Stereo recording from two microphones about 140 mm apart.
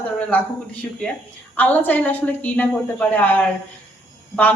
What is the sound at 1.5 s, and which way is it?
A woman's voice, 10° left (ahead or behind).